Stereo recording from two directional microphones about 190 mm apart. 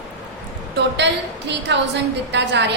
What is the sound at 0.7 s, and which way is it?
A woman's voice, 65° right (ahead or behind).